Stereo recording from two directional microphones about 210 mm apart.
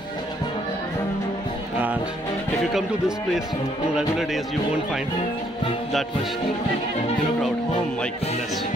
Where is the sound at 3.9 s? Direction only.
Centre (ahead or behind).